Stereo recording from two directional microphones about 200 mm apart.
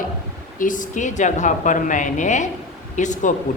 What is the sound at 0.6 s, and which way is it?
A woman's voice, 40° left (ahead or behind).